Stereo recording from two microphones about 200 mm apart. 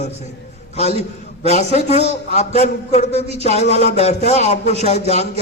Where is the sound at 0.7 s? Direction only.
35° left (ahead or behind).